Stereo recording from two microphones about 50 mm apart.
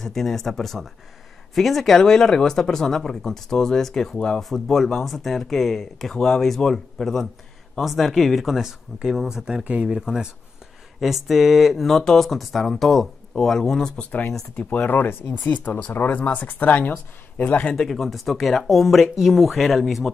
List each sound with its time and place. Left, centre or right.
0.0 s speech: centre
11.9 s speech: centre
14.6 s speech: left
14.9 s speech: left
17.4 s speech: left
17.7 s speech: centre